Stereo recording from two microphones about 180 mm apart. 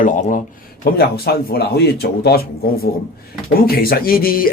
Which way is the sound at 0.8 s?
60° left (ahead or behind).